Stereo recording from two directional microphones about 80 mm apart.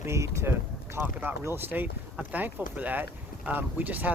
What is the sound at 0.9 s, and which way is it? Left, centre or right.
Speech, right.